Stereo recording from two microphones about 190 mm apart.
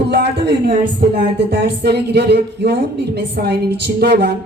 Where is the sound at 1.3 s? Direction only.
60° right (ahead or behind).